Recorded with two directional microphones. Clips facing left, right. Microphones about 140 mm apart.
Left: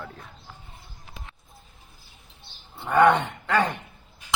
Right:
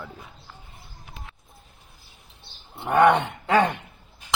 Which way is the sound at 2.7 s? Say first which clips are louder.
Right 1 dB; 20° right (ahead or behind).